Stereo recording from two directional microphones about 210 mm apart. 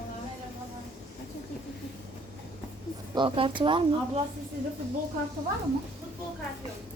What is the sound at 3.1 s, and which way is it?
Speech, 25° right (ahead or behind).